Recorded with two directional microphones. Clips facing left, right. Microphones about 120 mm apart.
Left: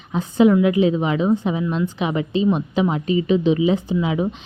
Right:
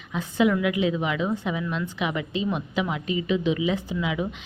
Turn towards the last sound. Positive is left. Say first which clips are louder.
# left 6 dB
turn(degrees=30)  # may be behind; listen again after turning